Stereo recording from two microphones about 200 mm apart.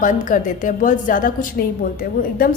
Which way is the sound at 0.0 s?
40° left (ahead or behind).